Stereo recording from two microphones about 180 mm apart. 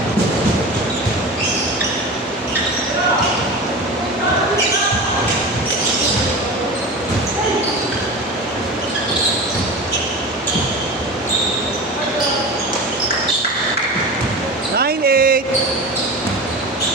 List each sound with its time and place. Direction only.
14.8 s basketball bounce: 60° right (ahead or behind)